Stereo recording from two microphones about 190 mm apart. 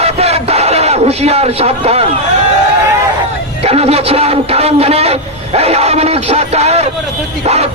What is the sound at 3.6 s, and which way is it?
A man's voice, 30° right (ahead or behind).